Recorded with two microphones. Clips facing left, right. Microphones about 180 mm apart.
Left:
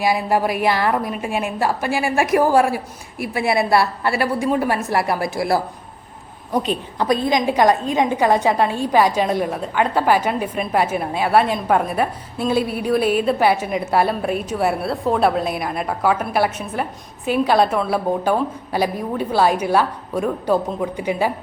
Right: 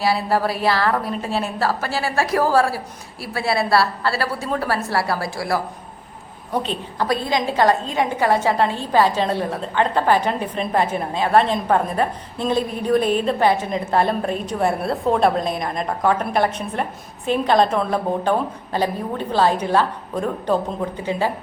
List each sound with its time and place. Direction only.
0.0 s a woman's voice: 15° left (ahead or behind)